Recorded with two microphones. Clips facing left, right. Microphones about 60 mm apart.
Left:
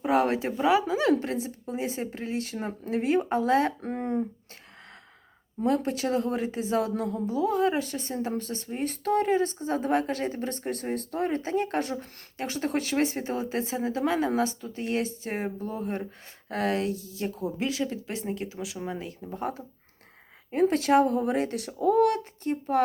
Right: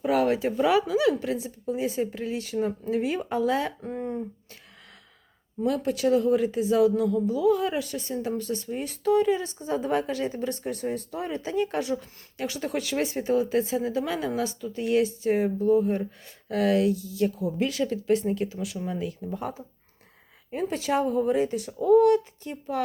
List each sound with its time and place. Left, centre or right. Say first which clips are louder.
0.0 s a sound: right 1 dB; left
0.6 s speech: even; left
0.9 s speech: right 1 dB; left
5.6 s speech: right 2 dB; left
20.5 s speech: left 5 dB; left
22.7 s speech: left 4 dB; left